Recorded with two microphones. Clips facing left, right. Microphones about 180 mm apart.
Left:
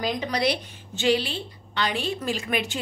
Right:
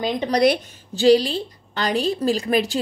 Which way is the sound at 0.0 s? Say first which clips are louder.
Right 5 dB; 30° right (ahead or behind).